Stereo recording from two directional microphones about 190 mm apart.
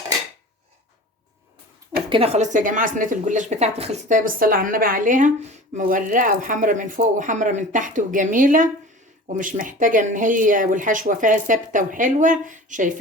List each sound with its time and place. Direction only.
2.0 s a woman's voice: 30° right (ahead or behind)